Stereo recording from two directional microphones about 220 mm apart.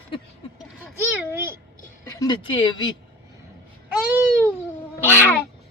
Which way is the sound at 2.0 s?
15° left (ahead or behind).